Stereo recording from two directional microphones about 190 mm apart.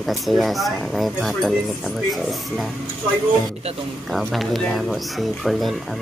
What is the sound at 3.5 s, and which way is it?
Speech, 30° right (ahead or behind).